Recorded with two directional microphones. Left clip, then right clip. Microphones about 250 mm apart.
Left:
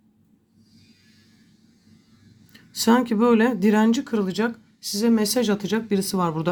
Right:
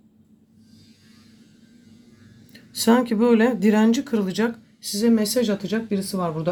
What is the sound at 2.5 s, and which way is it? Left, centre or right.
Speech, centre.